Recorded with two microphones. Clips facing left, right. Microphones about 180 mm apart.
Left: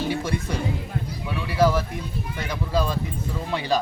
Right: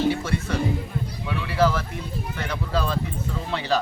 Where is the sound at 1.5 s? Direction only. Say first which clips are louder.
Left 1 dB; 10° left (ahead or behind).